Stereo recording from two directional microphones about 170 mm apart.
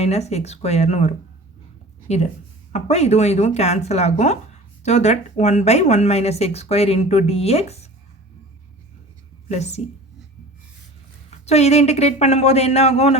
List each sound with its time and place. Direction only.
0.0 s speech: 40° left (ahead or behind)
9.5 s speech: 40° left (ahead or behind)
11.3 s speech: 40° left (ahead or behind)